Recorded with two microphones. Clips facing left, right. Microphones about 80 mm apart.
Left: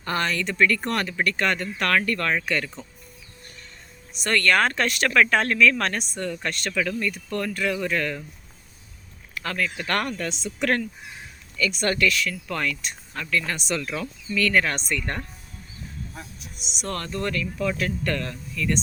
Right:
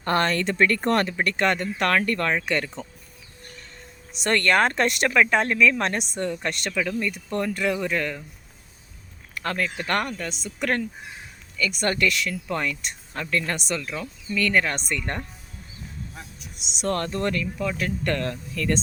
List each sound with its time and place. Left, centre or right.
0.0 s speech: right
4.2 s speech: right
9.4 s speech: right
10.0 s speech: centre
13.1 s speech: right
14.0 s speech: right
16.8 s speech: right
17.4 s speech: centre
18.0 s speech: right